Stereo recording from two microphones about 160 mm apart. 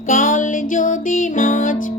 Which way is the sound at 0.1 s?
55° left (ahead or behind).